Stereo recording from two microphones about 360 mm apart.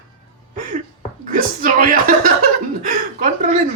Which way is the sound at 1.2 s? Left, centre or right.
Right.